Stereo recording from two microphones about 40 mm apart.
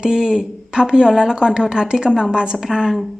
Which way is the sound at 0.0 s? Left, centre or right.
Centre.